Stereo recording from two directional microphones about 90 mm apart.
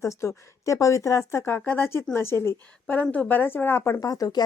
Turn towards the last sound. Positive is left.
turn(degrees=45)  # may be behind; listen again after turning